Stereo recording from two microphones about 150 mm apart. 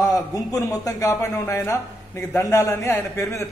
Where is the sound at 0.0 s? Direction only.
25° left (ahead or behind).